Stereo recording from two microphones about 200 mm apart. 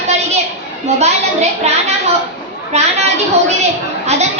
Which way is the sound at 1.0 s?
35° right (ahead or behind).